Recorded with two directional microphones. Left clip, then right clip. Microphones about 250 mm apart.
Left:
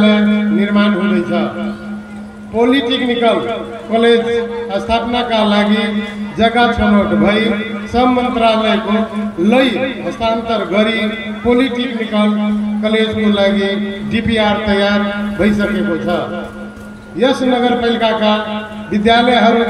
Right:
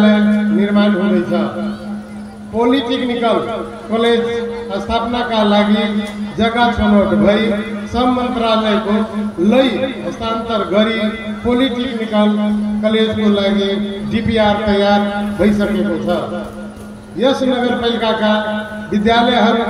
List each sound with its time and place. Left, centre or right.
0.0 s music: left
2.6 s a man's voice: left
17.2 s a man's voice: left